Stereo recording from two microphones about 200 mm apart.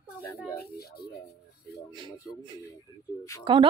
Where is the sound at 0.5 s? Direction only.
50° left (ahead or behind).